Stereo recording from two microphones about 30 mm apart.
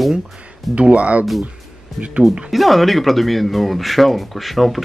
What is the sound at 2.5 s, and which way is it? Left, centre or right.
Speech, centre.